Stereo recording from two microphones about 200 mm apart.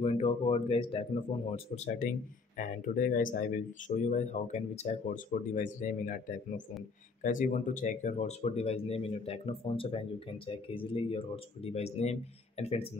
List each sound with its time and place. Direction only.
0.0 s speech: 30° left (ahead or behind)